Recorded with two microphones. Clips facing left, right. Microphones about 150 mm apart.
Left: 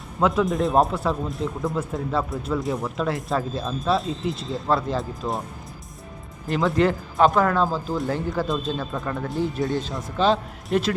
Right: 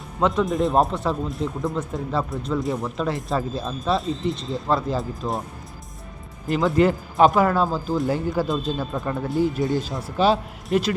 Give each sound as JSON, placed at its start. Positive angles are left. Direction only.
{"t": 0.2, "sound": "speech", "side_deg": 0}
{"t": 6.5, "sound": "speech", "side_deg": 0}